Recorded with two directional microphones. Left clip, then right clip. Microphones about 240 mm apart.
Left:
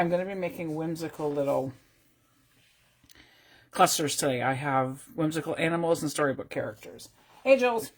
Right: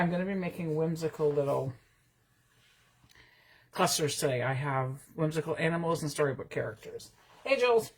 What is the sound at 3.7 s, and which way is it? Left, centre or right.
Speech, left.